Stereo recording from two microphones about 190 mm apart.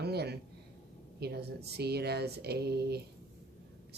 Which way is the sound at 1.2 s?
60° right (ahead or behind).